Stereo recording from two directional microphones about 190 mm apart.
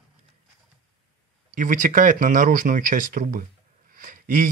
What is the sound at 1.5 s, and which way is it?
Speech, 45° right (ahead or behind).